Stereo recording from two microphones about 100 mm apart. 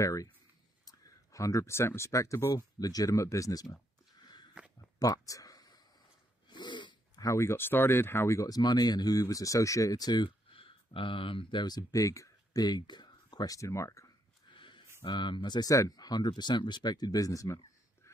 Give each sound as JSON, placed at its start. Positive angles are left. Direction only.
{"t": 0.0, "sound": "speech", "side_deg": 35}
{"t": 4.9, "sound": "a sound", "side_deg": 40}
{"t": 6.5, "sound": "snort", "side_deg": 50}
{"t": 7.2, "sound": "speech", "side_deg": 25}
{"t": 11.6, "sound": "speech", "side_deg": 40}
{"t": 14.5, "sound": "a sound", "side_deg": 55}
{"t": 15.0, "sound": "speech", "side_deg": 50}